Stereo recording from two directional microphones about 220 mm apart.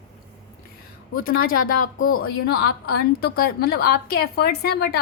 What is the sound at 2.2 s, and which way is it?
A woman's voice, 45° left (ahead or behind).